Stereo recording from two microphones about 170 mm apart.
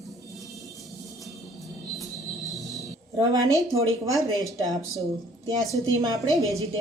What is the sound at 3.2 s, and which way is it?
Speech, 20° right (ahead or behind).